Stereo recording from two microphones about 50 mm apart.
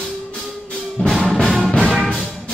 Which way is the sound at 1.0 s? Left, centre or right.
Centre.